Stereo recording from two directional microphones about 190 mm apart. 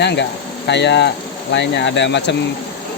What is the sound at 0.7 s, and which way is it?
Speech, 65° left (ahead or behind).